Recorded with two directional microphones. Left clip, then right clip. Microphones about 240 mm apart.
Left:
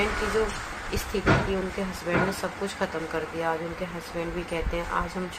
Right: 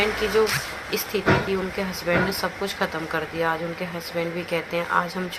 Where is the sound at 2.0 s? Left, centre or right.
Centre.